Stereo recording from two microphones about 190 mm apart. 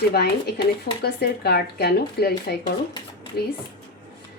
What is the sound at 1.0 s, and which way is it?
Speech, 60° left (ahead or behind).